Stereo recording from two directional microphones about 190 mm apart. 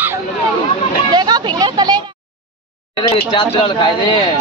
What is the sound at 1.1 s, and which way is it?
Speech, 20° right (ahead or behind).